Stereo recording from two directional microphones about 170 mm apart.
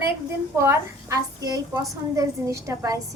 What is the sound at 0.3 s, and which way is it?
A woman's voice, 15° right (ahead or behind).